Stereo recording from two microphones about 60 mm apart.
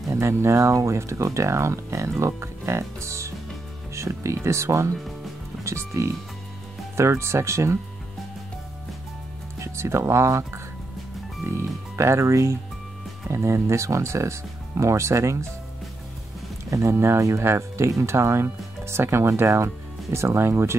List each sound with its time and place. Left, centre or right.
0.1 s speech: right
9.6 s speech: right
16.9 s speech: right